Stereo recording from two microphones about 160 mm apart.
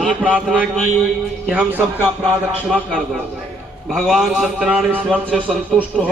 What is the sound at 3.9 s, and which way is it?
A man's voice, centre (ahead or behind).